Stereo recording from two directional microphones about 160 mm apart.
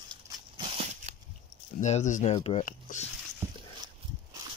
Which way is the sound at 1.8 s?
45° left (ahead or behind).